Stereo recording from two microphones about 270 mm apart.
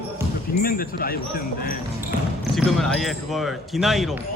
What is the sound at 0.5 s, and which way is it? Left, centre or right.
Speech, left.